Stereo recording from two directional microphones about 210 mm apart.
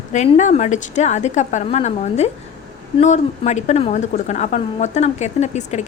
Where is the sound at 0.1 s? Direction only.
35° left (ahead or behind).